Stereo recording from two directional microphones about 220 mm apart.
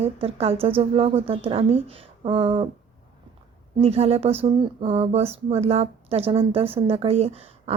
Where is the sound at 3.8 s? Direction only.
30° right (ahead or behind).